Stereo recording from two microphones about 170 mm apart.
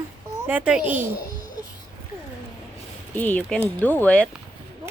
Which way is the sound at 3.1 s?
10° left (ahead or behind).